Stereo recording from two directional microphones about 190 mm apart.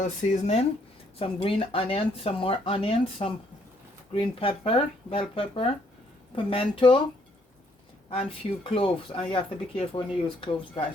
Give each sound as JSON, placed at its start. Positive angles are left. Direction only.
{"t": 0.0, "sound": "speech", "side_deg": 35}
{"t": 8.3, "sound": "speech", "side_deg": 30}